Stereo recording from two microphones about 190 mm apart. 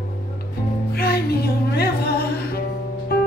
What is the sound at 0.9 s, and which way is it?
Music, 55° left (ahead or behind).